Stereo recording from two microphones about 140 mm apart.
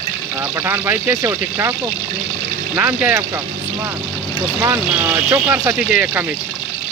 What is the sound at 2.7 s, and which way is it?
Speech, 10° right (ahead or behind).